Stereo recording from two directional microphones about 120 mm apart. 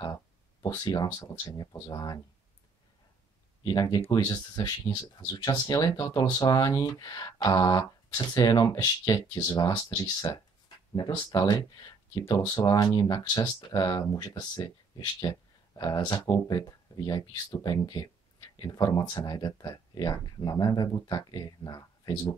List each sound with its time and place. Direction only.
0.0 s speech: 35° left (ahead or behind)
3.6 s speech: 35° left (ahead or behind)
12.5 s speech: 35° left (ahead or behind)